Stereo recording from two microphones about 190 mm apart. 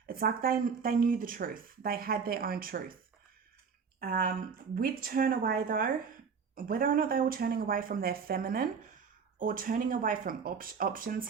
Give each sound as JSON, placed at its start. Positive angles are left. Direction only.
{"t": 0.1, "sound": "speech", "side_deg": -50}
{"t": 4.0, "sound": "speech", "side_deg": -50}